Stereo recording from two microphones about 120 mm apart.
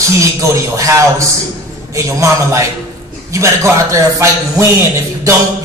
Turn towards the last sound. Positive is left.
turn(degrees=-25)  # may be behind; listen again after turning